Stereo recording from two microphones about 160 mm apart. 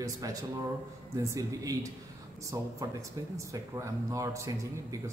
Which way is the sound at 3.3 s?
20° right (ahead or behind).